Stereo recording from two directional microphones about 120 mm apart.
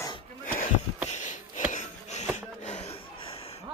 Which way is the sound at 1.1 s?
90° left.